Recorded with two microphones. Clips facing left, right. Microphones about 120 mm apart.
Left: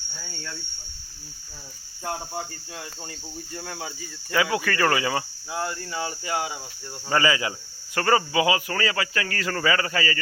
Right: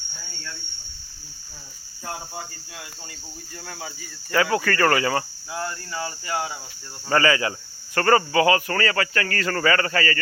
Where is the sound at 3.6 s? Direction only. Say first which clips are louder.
Even; 20° left (ahead or behind).